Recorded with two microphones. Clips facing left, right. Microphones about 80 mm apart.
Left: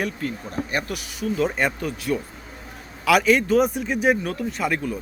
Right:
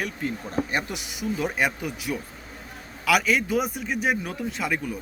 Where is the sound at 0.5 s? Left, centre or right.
Right.